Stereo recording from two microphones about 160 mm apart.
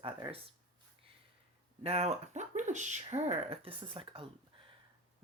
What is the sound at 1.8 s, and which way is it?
Speech, 40° right (ahead or behind).